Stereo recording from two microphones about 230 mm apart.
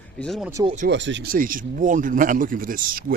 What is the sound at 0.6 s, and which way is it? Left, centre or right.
Speech, right.